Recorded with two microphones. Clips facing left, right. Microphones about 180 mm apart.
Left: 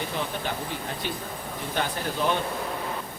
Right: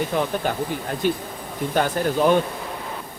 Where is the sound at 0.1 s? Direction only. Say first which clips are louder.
Right 9 dB; 55° right (ahead or behind).